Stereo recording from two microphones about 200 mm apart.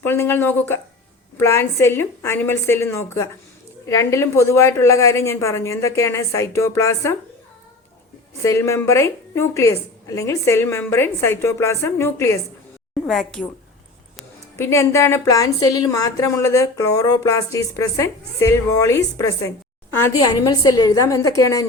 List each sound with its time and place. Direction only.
0.0 s a woman's voice: 10° left (ahead or behind)
8.4 s a woman's voice: 15° left (ahead or behind)
13.1 s a woman's voice: centre (ahead or behind)
14.6 s a woman's voice: 15° left (ahead or behind)